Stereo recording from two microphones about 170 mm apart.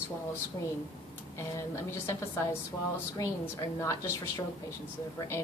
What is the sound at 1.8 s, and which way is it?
A woman's voice, 15° left (ahead or behind).